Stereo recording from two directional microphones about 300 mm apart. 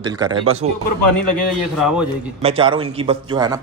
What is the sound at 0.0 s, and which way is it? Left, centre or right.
Speech, centre.